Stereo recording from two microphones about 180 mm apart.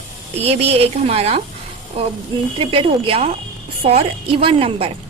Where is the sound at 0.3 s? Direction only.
35° right (ahead or behind).